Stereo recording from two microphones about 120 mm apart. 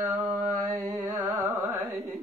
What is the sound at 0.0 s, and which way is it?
Mantra, 25° right (ahead or behind).